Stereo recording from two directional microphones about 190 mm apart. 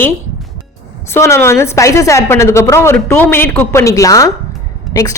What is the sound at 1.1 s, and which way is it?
Speech, 15° left (ahead or behind).